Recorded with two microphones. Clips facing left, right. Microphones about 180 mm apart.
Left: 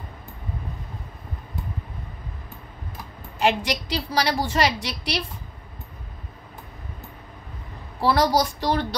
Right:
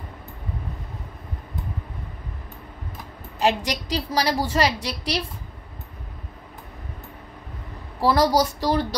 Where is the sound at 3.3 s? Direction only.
35° right (ahead or behind).